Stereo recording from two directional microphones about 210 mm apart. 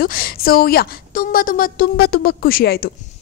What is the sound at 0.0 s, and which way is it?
A woman's voice, 45° left (ahead or behind).